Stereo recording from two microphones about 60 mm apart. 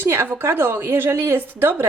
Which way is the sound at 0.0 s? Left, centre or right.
Right.